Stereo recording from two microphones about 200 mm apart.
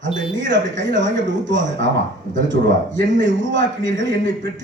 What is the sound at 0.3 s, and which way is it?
A man's voice, 65° right (ahead or behind).